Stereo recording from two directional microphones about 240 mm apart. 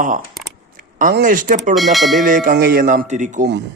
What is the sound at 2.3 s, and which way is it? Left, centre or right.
Speech, right.